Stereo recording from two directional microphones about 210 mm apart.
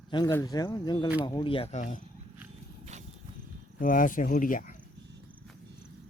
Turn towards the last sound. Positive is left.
turn(degrees=40)  # may be behind; listen again after turning